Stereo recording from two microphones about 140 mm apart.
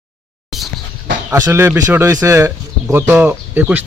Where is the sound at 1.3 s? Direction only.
20° right (ahead or behind).